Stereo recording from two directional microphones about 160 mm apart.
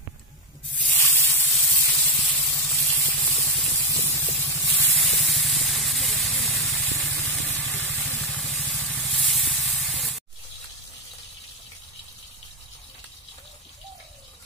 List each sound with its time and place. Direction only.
0.7 s spray: 10° left (ahead or behind)
1.5 s spray: centre (ahead or behind)
3.8 s spray: 15° left (ahead or behind)
4.6 s hiss: centre (ahead or behind)
7.8 s spray: 10° left (ahead or behind)